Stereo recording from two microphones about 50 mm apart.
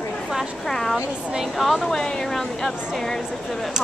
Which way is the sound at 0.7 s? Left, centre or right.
Centre.